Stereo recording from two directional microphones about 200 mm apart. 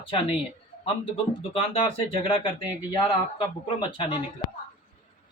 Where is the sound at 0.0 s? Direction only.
30° left (ahead or behind).